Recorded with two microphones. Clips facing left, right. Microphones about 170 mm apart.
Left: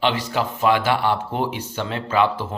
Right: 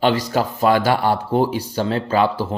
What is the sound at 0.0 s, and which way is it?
Speech, 40° right (ahead or behind).